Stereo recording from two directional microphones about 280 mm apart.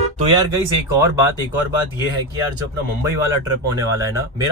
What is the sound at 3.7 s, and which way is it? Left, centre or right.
Speech, centre.